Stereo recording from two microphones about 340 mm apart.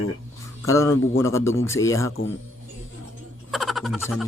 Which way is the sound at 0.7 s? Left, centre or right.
Centre.